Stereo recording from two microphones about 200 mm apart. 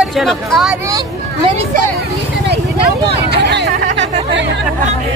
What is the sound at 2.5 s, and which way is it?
Vehicle, 55° right (ahead or behind).